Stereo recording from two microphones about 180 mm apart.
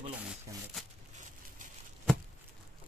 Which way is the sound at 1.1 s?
45° right (ahead or behind).